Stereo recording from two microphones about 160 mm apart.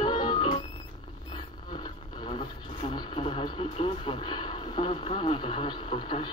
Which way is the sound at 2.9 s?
40° left (ahead or behind).